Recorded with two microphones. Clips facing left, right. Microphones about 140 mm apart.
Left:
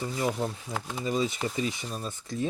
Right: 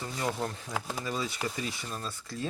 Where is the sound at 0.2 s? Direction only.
10° left (ahead or behind).